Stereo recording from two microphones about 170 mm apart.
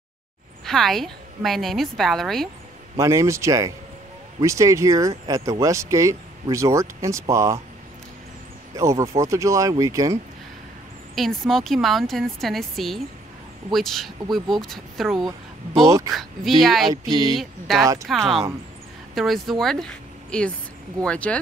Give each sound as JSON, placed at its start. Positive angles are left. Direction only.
{"t": 0.7, "sound": "a woman's voice", "side_deg": 0}
{"t": 3.0, "sound": "speech", "side_deg": -15}
{"t": 8.7, "sound": "speech", "side_deg": -15}
{"t": 11.1, "sound": "a woman's voice", "side_deg": 0}
{"t": 17.1, "sound": "speech", "side_deg": -25}
{"t": 17.4, "sound": "a woman's voice", "side_deg": 0}